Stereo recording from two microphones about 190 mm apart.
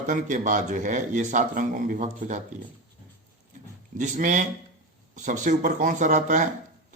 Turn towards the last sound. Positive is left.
turn(degrees=-40)  # may be behind; listen again after turning